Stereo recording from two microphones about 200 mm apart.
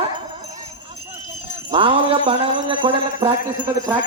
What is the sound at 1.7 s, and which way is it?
Speech, 25° right (ahead or behind).